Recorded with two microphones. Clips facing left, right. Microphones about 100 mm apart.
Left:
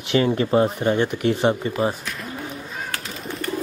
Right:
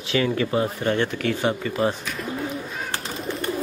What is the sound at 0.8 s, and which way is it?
Speech, 15° left (ahead or behind).